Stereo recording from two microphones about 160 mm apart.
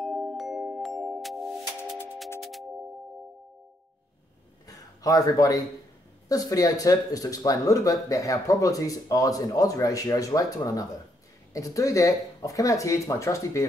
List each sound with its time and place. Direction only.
0.0 s music: centre (ahead or behind)
4.6 s a sound: 20° left (ahead or behind)
6.2 s speech: 20° left (ahead or behind)